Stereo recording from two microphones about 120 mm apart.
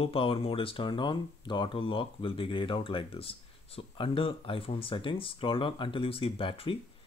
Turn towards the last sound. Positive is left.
turn(degrees=50)  # may be behind; listen again after turning